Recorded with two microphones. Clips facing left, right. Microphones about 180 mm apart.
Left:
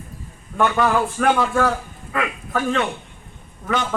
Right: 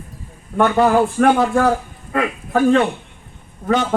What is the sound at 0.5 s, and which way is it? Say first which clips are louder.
A man's voice: right 5 dB; 35° right (ahead or behind).